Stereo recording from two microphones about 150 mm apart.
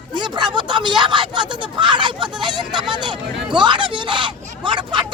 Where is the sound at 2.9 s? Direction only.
30° right (ahead or behind).